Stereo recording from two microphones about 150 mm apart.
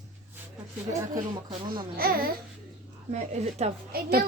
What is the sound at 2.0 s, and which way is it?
Speech, 85° right.